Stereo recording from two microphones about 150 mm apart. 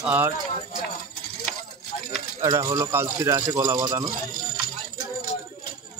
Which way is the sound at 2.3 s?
20° right (ahead or behind).